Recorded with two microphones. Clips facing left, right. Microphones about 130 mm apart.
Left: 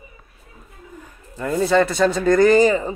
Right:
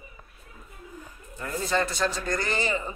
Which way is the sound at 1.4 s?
90° left.